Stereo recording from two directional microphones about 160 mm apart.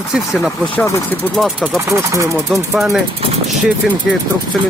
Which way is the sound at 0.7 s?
15° left (ahead or behind).